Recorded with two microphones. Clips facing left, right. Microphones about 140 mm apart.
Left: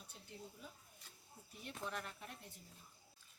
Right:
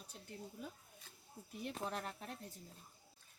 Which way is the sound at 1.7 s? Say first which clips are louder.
Right 1 dB; 35° right (ahead or behind).